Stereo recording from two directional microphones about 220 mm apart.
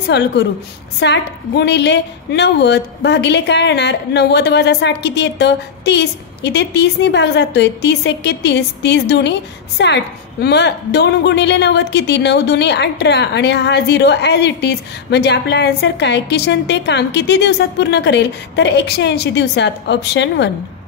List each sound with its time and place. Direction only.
0.0 s a woman's voice: 50° left (ahead or behind)